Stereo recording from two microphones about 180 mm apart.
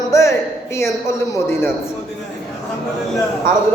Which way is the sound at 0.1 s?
15° left (ahead or behind).